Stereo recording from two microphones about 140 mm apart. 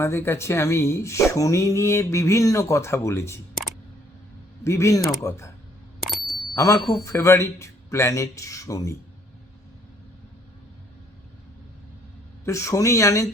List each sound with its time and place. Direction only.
0.0 s speech: 20° left (ahead or behind)
4.6 s speech: 20° left (ahead or behind)
6.0 s bicycle bell: centre (ahead or behind)
6.5 s speech: 25° left (ahead or behind)
12.5 s speech: 20° left (ahead or behind)